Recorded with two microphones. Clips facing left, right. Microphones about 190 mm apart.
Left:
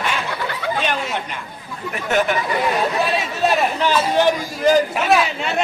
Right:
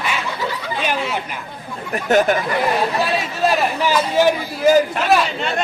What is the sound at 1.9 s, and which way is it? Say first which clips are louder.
Speech: right 4 dB; 40° right (ahead or behind).